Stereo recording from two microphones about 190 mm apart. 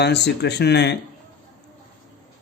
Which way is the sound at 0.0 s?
65° left (ahead or behind).